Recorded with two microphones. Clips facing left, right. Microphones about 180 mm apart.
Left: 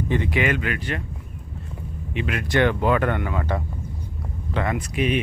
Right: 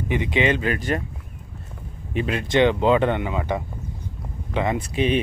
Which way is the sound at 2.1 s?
30° right (ahead or behind).